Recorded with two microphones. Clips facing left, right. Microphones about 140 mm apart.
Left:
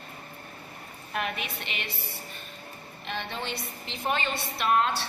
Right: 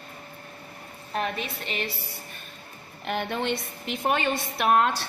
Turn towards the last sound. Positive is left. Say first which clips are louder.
# right 3 dB
turn(degrees=-55)  # may be behind; listen again after turning